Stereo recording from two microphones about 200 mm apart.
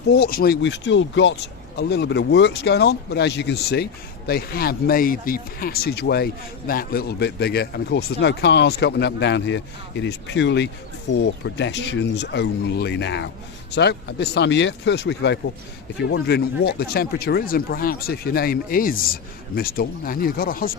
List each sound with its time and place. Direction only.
0.1 s speech: 50° left (ahead or behind)